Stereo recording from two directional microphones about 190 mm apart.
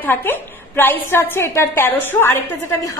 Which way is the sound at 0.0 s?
10° left (ahead or behind).